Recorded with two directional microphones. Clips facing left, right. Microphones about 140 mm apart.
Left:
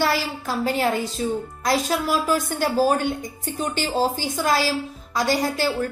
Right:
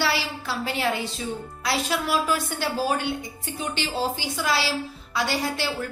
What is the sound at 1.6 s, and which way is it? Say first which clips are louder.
A woman's voice: left 4 dB; 40° left (ahead or behind).